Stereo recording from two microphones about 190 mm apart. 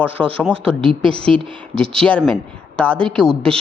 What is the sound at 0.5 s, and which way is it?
Speech, 25° right (ahead or behind).